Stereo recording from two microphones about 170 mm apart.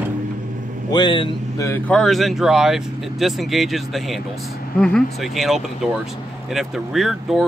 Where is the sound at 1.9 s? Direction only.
Centre (ahead or behind).